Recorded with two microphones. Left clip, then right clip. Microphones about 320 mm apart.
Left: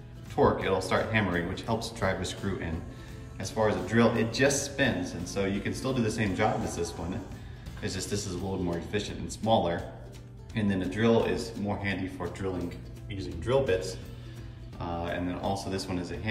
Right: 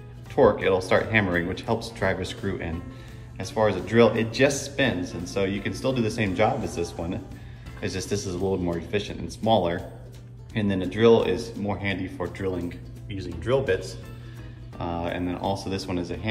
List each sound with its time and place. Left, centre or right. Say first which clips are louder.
0.4 s speech: right 6 dB; centre